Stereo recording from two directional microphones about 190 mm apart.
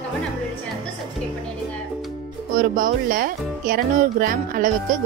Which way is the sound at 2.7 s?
45° right (ahead or behind).